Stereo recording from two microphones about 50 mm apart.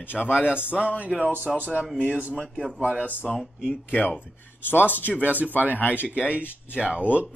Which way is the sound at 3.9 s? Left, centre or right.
Left.